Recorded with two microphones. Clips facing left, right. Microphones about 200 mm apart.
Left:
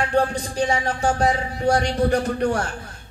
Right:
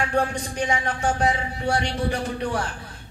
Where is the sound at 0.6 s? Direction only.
35° left (ahead or behind).